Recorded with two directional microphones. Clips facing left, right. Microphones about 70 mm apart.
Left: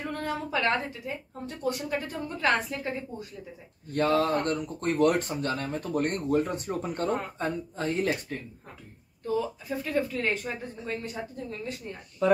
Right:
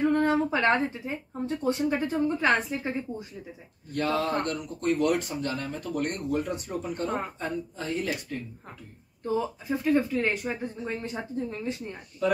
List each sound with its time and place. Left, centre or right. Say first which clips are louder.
0.0 s a woman's voice: right 9 dB; right
3.9 s speech: left 2 dB; left
9.2 s a woman's voice: right 1 dB; centre